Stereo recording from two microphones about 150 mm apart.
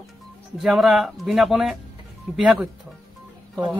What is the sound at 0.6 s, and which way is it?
A man's voice, centre (ahead or behind).